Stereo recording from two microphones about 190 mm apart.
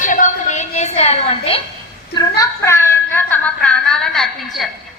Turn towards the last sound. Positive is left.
turn(degrees=0)  # may be behind; listen again after turning